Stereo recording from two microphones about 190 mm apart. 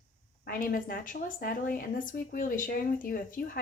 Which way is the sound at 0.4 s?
50° left (ahead or behind).